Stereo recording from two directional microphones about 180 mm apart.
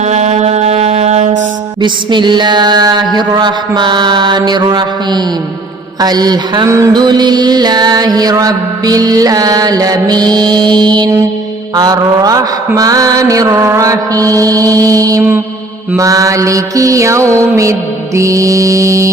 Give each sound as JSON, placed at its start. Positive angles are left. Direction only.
{"t": 0.0, "sound": "mantra", "side_deg": -40}
{"t": 1.8, "sound": "mantra", "side_deg": -25}